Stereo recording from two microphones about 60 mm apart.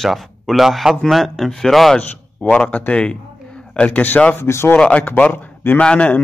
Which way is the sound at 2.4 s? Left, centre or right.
Left.